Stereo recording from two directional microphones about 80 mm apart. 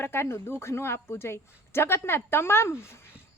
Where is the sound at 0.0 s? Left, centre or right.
Left.